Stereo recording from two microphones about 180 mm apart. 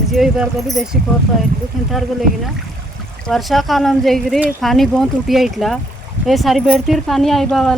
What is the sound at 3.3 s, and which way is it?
Speech, centre (ahead or behind).